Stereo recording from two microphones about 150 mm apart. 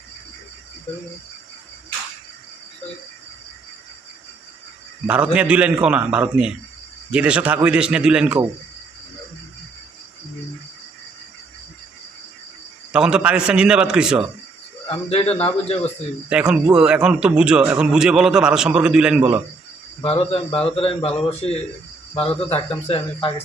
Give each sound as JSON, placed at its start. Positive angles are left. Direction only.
{"t": 5.0, "sound": "a man's voice", "side_deg": -10}
{"t": 12.9, "sound": "a man's voice", "side_deg": -5}
{"t": 14.8, "sound": "speech", "side_deg": 40}
{"t": 16.3, "sound": "a man's voice", "side_deg": -5}
{"t": 20.0, "sound": "speech", "side_deg": 40}
{"t": 20.5, "sound": "a man's voice", "side_deg": 5}
{"t": 20.7, "sound": "speech", "side_deg": 40}